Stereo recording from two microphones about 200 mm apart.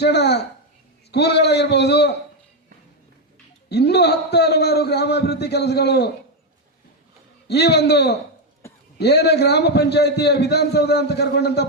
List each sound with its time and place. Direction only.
0.0 s a man's voice: 55° left (ahead or behind)
3.7 s a man's voice: 55° left (ahead or behind)
7.4 s a man's voice: 55° left (ahead or behind)